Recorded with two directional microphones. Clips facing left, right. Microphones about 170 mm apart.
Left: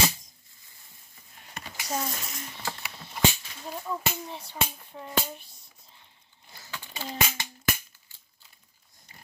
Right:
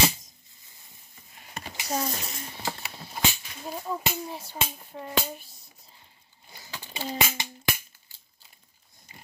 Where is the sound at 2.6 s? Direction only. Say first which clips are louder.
Right 3 dB; 25° right (ahead or behind).